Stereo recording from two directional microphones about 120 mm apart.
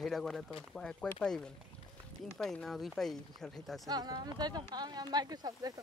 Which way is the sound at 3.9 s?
35° right (ahead or behind).